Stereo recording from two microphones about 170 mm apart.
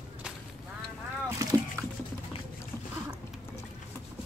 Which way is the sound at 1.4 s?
20° right (ahead or behind).